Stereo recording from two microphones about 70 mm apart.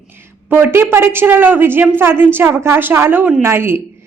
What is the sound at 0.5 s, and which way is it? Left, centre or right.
Speech, right.